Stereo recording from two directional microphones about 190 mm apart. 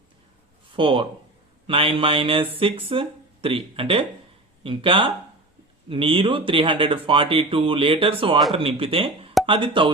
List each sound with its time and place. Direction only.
0.8 s speech: 25° right (ahead or behind)